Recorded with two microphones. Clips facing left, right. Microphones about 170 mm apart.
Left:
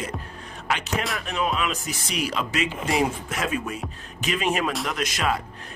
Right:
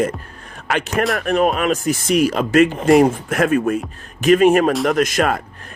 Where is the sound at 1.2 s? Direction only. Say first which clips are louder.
Right 10 dB; 55° right (ahead or behind).